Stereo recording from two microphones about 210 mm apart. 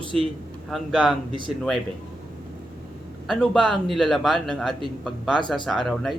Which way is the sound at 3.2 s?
Centre (ahead or behind).